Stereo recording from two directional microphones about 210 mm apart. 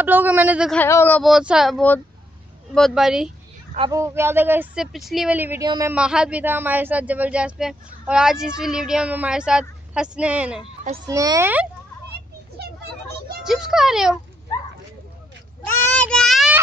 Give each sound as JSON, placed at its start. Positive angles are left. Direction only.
{"t": 0.0, "sound": "speech", "side_deg": -10}
{"t": 0.7, "sound": "a man's voice", "side_deg": 10}
{"t": 3.9, "sound": "speech", "side_deg": -10}
{"t": 5.9, "sound": "a man's voice", "side_deg": -5}
{"t": 12.6, "sound": "a sound", "side_deg": -50}
{"t": 13.4, "sound": "a man's voice", "side_deg": 0}
{"t": 15.9, "sound": "child singing", "side_deg": 5}